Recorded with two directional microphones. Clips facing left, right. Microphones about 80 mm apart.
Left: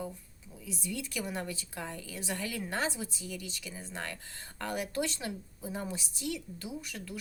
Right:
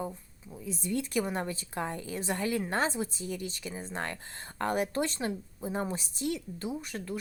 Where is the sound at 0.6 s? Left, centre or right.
Right.